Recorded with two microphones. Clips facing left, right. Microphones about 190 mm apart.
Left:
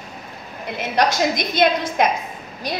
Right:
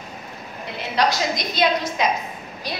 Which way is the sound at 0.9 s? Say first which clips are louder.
Left 2 dB; 50° left (ahead or behind).